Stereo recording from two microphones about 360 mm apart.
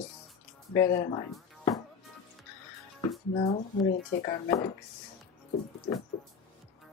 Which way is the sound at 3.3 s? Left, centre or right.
Centre.